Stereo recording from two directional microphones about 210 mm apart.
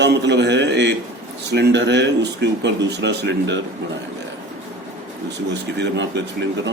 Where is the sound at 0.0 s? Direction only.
55° right (ahead or behind).